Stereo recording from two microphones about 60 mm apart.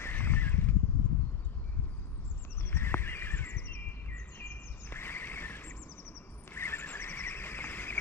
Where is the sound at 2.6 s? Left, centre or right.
Left.